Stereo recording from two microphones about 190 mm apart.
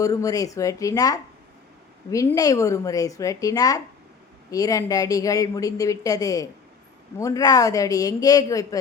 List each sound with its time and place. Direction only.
0.0 s a woman's voice: 15° left (ahead or behind)